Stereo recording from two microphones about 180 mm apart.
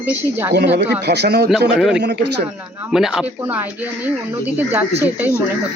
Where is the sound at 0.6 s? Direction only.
65° right (ahead or behind).